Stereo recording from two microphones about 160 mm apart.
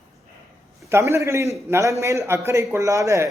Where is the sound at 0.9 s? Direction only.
15° right (ahead or behind).